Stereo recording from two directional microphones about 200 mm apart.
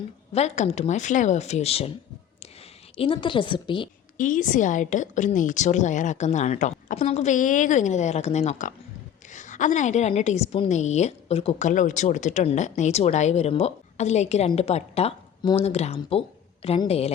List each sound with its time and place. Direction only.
0.3 s a woman's voice: 35° left (ahead or behind)
3.0 s a woman's voice: 25° left (ahead or behind)
4.2 s a woman's voice: 40° left (ahead or behind)